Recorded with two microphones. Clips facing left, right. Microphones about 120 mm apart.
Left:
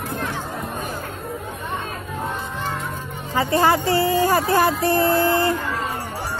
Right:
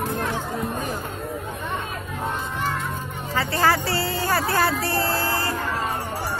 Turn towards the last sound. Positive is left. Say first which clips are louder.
# left 7 dB
turn(degrees=20)  # may be behind; listen again after turning